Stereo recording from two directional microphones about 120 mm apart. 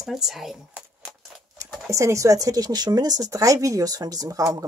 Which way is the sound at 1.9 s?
25° right (ahead or behind).